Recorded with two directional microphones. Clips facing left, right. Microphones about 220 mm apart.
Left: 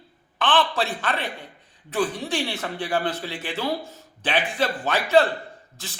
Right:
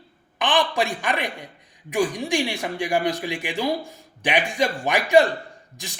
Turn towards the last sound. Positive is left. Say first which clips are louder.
# right 1 dB
turn(degrees=-15)  # may be behind; listen again after turning